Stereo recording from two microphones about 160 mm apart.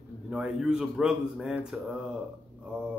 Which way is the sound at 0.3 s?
5° right (ahead or behind).